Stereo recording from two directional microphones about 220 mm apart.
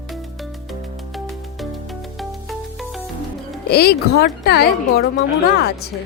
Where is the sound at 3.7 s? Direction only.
45° left (ahead or behind).